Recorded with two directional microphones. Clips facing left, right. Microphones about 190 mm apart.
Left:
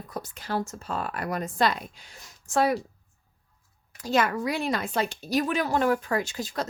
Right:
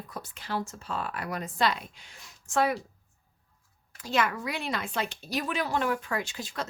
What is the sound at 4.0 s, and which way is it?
Speech, 40° left (ahead or behind).